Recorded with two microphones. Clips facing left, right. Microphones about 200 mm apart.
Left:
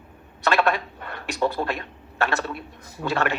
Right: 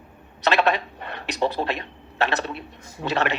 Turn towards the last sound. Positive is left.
turn(degrees=-20)  # may be behind; listen again after turning